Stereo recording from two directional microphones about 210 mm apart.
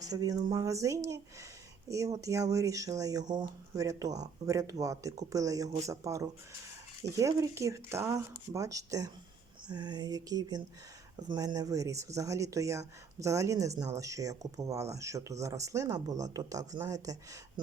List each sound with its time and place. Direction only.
0.1 s speech: 20° right (ahead or behind)
9.6 s a sound: 20° right (ahead or behind)
11.2 s speech: 20° right (ahead or behind)